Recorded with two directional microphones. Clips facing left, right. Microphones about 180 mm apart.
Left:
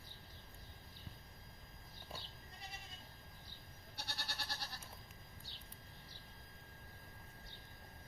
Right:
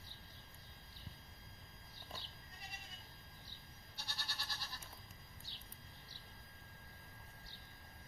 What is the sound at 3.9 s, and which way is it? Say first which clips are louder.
Goat: left 3 dB; 65° left (ahead or behind).